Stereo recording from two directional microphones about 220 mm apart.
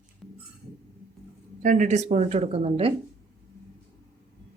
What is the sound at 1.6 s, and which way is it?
A woman's voice, 35° right (ahead or behind).